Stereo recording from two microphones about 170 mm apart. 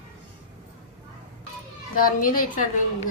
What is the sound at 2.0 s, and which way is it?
Speech, 55° left (ahead or behind).